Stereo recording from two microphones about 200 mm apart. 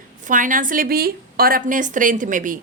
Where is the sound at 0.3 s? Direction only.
40° right (ahead or behind).